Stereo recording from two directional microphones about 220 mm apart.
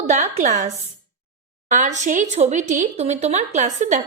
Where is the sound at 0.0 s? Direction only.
30° right (ahead or behind).